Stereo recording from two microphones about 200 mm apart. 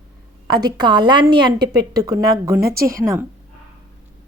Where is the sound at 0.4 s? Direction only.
20° right (ahead or behind).